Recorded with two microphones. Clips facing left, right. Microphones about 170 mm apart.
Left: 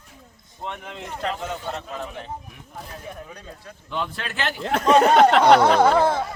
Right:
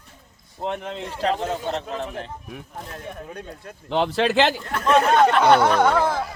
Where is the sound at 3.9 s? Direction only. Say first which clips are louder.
Right 9 dB; 90° right.